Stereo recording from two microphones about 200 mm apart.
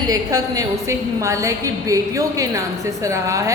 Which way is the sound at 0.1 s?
15° right (ahead or behind).